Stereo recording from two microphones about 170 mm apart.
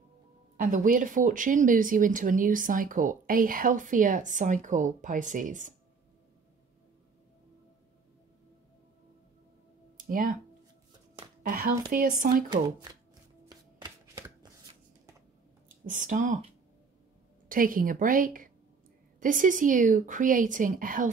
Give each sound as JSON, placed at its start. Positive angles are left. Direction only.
{"t": 0.6, "sound": "speech", "side_deg": -50}
{"t": 10.0, "sound": "speech", "side_deg": -55}
{"t": 11.4, "sound": "speech", "side_deg": -60}
{"t": 13.7, "sound": "shuffling cards", "side_deg": -15}
{"t": 15.8, "sound": "speech", "side_deg": -50}
{"t": 17.5, "sound": "speech", "side_deg": -55}